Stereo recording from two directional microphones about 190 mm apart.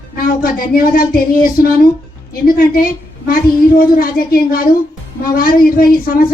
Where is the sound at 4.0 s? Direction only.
50° left (ahead or behind).